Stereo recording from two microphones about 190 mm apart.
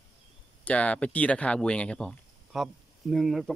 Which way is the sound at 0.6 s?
5° left (ahead or behind).